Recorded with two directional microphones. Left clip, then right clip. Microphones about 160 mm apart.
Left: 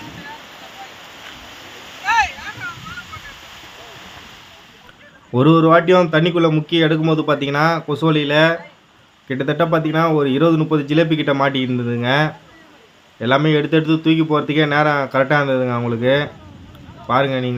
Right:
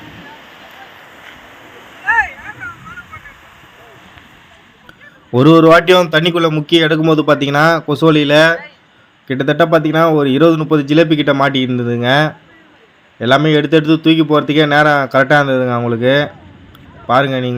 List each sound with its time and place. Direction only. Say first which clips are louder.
5.3 s a man's voice: right 5 dB; 30° right (ahead or behind)